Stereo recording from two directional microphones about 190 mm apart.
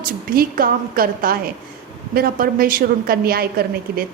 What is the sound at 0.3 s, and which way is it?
A woman's voice, 50° right (ahead or behind).